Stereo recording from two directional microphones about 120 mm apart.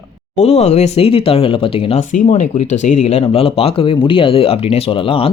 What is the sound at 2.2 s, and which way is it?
Speech, 80° left.